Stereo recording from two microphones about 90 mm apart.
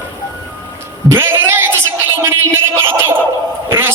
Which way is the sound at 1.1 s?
25° right (ahead or behind).